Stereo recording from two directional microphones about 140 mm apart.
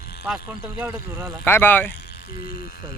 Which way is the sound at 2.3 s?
90° left.